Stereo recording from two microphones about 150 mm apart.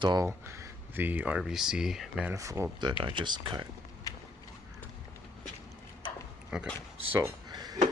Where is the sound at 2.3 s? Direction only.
20° right (ahead or behind).